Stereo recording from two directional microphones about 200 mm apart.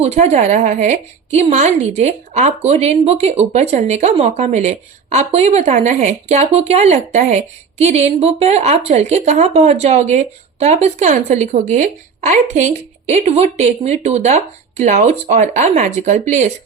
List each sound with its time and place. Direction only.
0.0 s speech: 35° right (ahead or behind)